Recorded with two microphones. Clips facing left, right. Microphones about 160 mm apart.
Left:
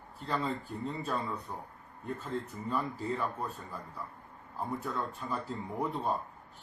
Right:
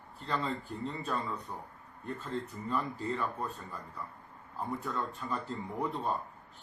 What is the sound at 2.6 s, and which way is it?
Speech, 5° left (ahead or behind).